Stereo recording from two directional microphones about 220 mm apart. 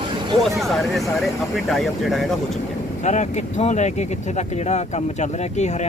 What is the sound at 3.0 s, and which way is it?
Speech, 30° left (ahead or behind).